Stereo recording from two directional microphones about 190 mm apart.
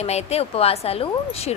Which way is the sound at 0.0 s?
35° left (ahead or behind).